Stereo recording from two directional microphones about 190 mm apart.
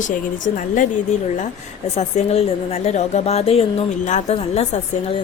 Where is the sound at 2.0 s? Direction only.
35° left (ahead or behind).